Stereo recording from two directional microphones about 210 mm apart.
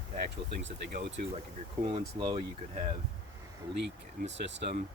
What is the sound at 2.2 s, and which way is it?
Speech, 20° right (ahead or behind).